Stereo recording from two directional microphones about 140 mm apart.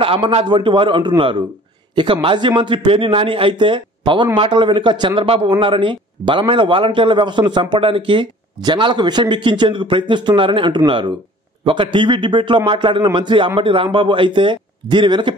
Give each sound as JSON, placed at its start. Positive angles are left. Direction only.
{"t": 0.0, "sound": "a man's voice", "side_deg": -40}